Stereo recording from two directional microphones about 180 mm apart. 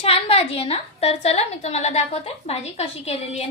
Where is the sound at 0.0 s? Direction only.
35° left (ahead or behind).